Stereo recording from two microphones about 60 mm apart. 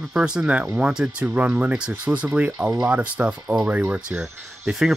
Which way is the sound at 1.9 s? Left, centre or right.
Right.